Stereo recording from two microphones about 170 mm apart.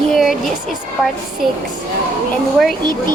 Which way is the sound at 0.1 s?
Centre (ahead or behind).